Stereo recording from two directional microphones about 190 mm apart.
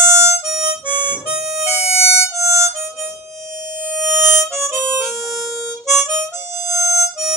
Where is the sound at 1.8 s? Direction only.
35° left (ahead or behind).